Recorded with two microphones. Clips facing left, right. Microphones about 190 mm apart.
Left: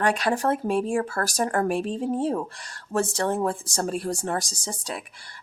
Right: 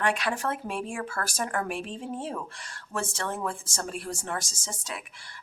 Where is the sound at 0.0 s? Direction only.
35° left (ahead or behind).